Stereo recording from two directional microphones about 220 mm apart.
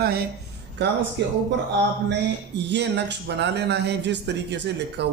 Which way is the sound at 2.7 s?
50° right (ahead or behind).